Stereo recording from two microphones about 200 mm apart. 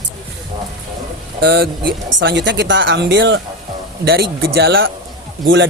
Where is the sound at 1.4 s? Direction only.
55° right (ahead or behind).